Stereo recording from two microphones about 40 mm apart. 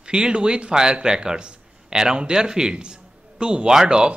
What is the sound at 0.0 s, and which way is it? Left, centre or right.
Speech, right.